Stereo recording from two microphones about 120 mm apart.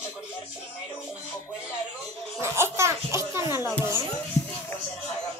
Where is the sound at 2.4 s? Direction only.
20° right (ahead or behind).